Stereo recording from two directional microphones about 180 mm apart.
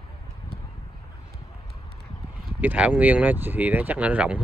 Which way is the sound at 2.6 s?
5° right (ahead or behind).